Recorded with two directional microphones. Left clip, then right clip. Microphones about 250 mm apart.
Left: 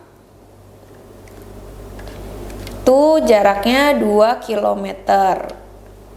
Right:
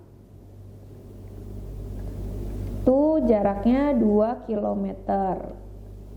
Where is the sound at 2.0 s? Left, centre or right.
Left.